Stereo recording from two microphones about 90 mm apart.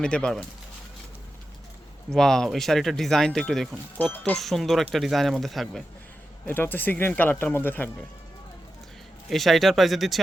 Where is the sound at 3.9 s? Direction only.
20° left (ahead or behind).